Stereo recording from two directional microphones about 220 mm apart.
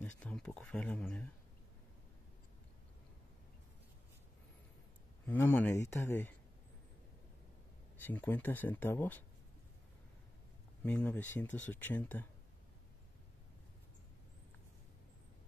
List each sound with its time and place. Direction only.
0.2 s speech: 5° left (ahead or behind)
5.2 s speech: 10° left (ahead or behind)
8.0 s speech: 10° left (ahead or behind)
10.8 s speech: 5° left (ahead or behind)